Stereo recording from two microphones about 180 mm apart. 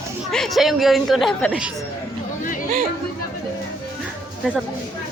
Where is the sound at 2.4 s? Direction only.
45° left (ahead or behind).